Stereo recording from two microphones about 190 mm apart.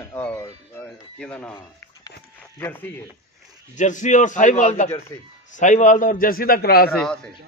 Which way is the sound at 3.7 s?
40° left (ahead or behind).